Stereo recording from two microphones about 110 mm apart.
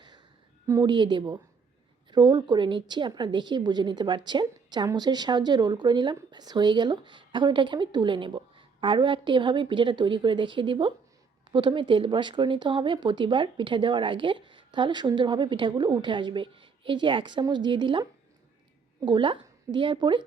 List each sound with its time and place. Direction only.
0.9 s speech: 45° right (ahead or behind)
19.0 s speech: 50° right (ahead or behind)